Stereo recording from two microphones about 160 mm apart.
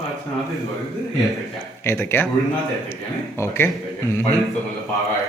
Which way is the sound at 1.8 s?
15° left (ahead or behind).